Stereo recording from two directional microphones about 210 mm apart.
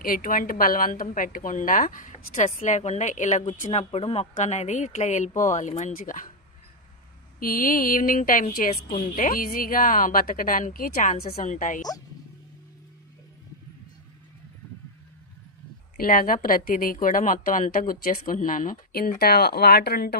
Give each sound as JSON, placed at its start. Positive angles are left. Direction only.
{"t": 0.0, "sound": "speech", "side_deg": 40}
{"t": 7.3, "sound": "speech", "side_deg": 40}
{"t": 16.0, "sound": "speech", "side_deg": 40}